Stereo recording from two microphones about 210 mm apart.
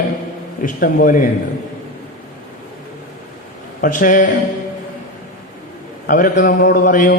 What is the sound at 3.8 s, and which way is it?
Mantra, 40° left (ahead or behind).